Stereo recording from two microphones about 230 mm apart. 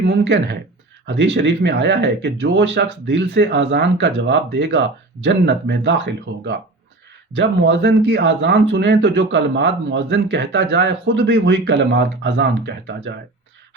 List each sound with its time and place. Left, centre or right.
0.0 s speech: right